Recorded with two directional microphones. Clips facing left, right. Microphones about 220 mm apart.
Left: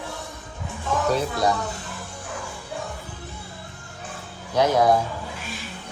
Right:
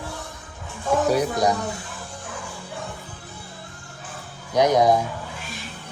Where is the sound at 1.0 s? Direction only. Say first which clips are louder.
Even; 15° right (ahead or behind).